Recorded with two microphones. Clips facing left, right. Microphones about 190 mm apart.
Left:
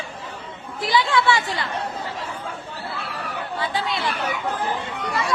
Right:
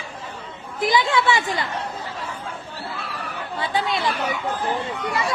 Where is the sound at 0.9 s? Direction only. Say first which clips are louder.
Left 1 dB; 20° right (ahead or behind).